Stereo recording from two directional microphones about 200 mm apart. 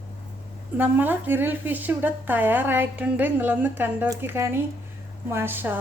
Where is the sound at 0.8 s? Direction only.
10° right (ahead or behind).